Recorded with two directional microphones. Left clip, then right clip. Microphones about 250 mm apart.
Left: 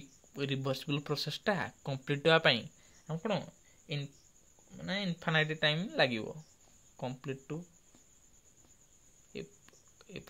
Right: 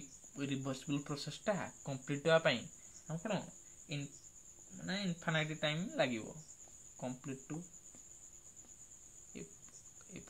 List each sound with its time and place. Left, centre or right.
0.3 s speech: left
4.7 s speech: left
9.3 s speech: left